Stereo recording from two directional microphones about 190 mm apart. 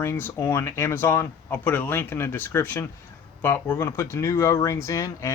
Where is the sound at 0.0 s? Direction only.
15° left (ahead or behind).